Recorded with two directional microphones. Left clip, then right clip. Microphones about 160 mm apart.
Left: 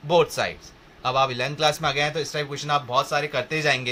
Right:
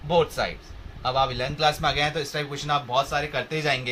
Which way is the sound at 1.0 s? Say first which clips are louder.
Left 2 dB; 50° left (ahead or behind).